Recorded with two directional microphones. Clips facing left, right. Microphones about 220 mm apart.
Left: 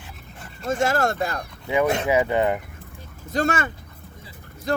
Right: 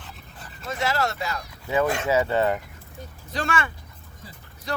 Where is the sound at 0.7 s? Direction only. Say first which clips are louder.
Left 5 dB; 50° left (ahead or behind).